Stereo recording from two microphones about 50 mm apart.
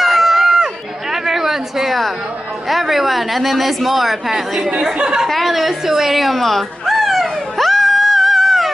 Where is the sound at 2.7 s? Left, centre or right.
Centre.